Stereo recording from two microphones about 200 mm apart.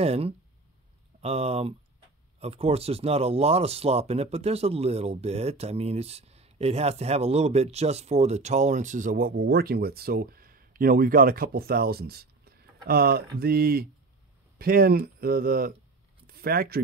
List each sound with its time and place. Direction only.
0.0 s speech: 30° right (ahead or behind); by 16.8 s 50° right (ahead or behind)